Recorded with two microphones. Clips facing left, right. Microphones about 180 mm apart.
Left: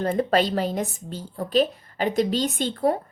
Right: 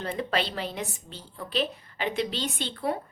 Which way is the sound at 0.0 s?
45° left (ahead or behind).